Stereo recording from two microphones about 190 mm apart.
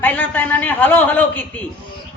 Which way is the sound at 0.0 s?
10° left (ahead or behind).